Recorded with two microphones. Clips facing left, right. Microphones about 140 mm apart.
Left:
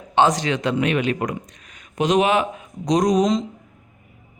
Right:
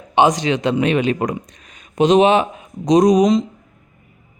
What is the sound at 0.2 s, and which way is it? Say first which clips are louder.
Speech: right 3 dB; 20° right (ahead or behind).